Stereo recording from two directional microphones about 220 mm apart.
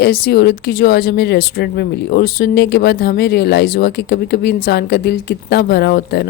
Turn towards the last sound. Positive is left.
turn(degrees=45)  # may be behind; listen again after turning